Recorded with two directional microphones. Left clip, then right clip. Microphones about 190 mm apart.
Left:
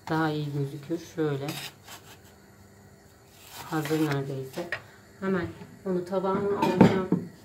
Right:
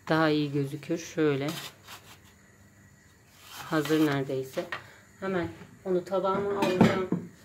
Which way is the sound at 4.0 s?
55° right (ahead or behind).